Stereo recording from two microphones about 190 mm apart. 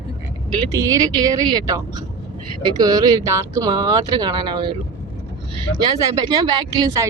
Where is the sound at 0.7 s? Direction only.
15° right (ahead or behind).